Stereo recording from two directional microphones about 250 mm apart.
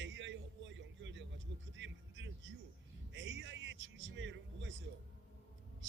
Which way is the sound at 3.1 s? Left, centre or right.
Right.